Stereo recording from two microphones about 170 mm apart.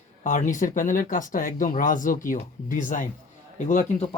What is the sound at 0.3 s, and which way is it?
Speech, 50° left (ahead or behind).